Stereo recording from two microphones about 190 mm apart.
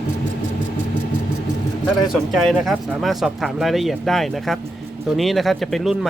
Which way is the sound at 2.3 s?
Centre (ahead or behind).